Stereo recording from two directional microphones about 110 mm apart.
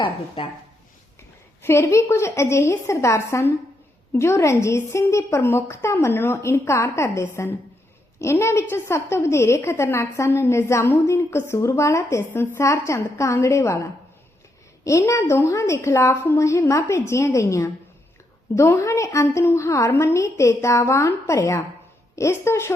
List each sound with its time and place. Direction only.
0.4 s speech: 55° left (ahead or behind)
1.6 s a woman's voice: 25° left (ahead or behind)
14.8 s a woman's voice: 25° left (ahead or behind)